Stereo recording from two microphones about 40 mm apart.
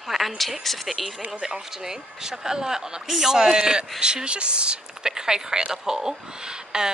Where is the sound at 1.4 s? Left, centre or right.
Centre.